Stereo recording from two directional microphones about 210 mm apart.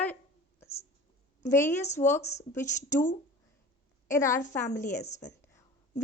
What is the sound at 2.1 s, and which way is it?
Speech, 30° left (ahead or behind).